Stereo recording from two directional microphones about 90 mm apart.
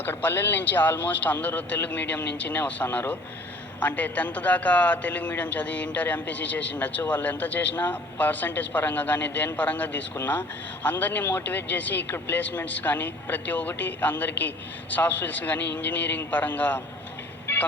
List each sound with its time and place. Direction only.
0.0 s a man's voice: 20° left (ahead or behind)
17.4 s vehicle: 20° left (ahead or behind)